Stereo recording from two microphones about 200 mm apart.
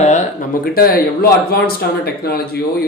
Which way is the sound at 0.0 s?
35° left (ahead or behind).